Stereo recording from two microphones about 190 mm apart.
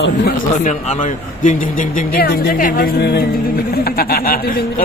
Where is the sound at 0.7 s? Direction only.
40° left (ahead or behind).